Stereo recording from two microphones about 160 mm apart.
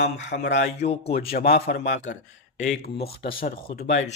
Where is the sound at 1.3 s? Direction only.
75° left (ahead or behind); by 2.0 s 90° left.